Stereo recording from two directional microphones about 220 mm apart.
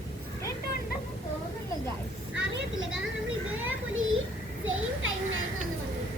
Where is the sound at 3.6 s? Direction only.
65° right (ahead or behind).